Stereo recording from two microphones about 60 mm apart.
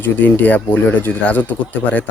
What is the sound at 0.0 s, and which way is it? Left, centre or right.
Speech, left.